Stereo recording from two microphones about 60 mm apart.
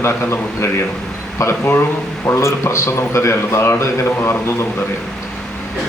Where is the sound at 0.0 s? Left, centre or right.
Left.